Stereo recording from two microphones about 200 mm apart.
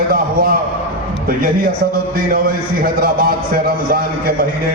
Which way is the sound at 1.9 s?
50° right (ahead or behind).